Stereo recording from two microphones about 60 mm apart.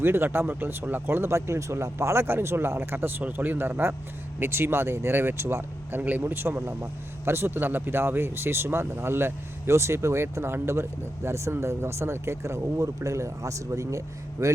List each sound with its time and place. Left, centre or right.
0.0 s speech: right
6.0 s speech: right